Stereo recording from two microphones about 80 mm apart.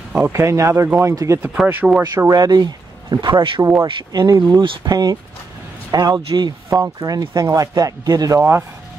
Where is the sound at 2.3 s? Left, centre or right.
Right.